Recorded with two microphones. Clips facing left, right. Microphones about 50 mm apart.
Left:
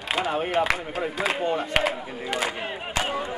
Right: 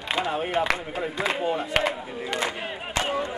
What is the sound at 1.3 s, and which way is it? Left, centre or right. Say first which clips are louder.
Speech: even; centre.